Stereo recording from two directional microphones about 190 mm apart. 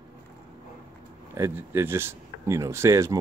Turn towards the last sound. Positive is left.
turn(degrees=-15)  # may be behind; listen again after turning